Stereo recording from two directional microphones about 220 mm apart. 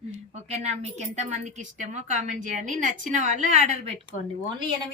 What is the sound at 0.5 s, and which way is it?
A woman's voice, 30° right (ahead or behind).